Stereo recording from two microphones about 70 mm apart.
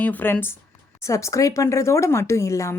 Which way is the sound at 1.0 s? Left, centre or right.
Left.